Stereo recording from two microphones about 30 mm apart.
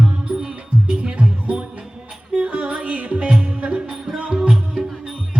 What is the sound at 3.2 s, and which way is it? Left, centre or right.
Music, right.